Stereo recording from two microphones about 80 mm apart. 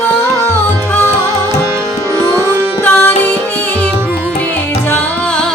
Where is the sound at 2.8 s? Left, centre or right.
Left.